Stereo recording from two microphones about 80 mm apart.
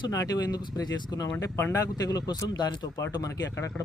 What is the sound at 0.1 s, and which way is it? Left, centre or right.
Speech, left.